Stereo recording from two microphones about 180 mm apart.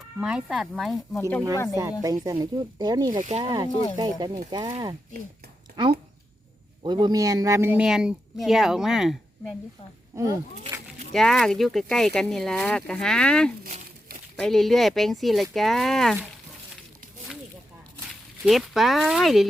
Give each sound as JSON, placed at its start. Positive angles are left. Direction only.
{"t": 0.2, "sound": "speech", "side_deg": -5}
{"t": 1.1, "sound": "speech", "side_deg": 10}
{"t": 1.7, "sound": "speech", "side_deg": -15}
{"t": 3.7, "sound": "speech", "side_deg": 30}
{"t": 3.9, "sound": "speech", "side_deg": -25}
{"t": 6.8, "sound": "speech", "side_deg": -25}
{"t": 11.1, "sound": "speech", "side_deg": 0}
{"t": 18.1, "sound": "speech", "side_deg": 0}